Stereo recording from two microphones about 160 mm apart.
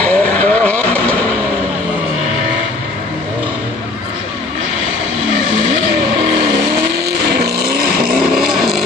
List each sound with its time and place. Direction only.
0.0 s vehicle: 10° left (ahead or behind)
7.1 s vehicle: 80° right
8.1 s vehicle: 5° right (ahead or behind)